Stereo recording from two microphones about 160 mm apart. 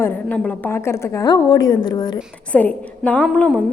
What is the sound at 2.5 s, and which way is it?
A woman's voice, 10° left (ahead or behind).